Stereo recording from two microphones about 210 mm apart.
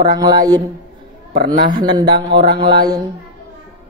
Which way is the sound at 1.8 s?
20° right (ahead or behind).